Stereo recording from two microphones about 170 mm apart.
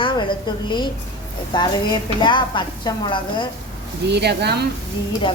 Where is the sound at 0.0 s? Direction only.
30° left (ahead or behind).